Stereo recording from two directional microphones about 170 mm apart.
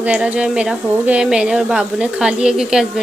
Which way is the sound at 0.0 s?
10° right (ahead or behind).